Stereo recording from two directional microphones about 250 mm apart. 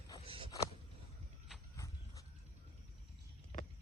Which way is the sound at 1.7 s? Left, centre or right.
Centre.